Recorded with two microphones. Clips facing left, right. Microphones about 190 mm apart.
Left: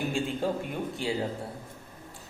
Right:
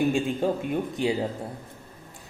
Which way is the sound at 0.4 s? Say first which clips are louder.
Right 5 dB; 15° right (ahead or behind).